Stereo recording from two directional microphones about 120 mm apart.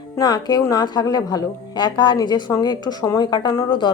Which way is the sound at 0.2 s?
35° left (ahead or behind).